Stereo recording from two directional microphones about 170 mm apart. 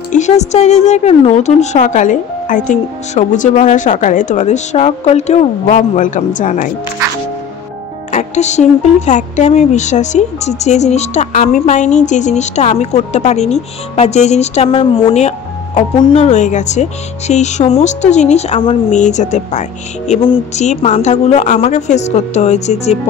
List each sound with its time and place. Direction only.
0.1 s a woman's voice: 45° left (ahead or behind)
8.1 s speech: 45° left (ahead or behind)
16.0 s speech: 30° left (ahead or behind)
16.3 s speech: 45° left (ahead or behind)
20.1 s speech: 30° left (ahead or behind)
20.5 s speech: 40° left (ahead or behind)